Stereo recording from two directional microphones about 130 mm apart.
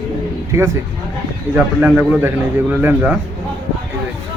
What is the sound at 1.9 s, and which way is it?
A man's voice, 10° right (ahead or behind).